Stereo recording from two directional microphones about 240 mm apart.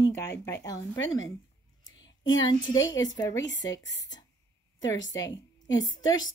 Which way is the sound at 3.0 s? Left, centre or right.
Centre.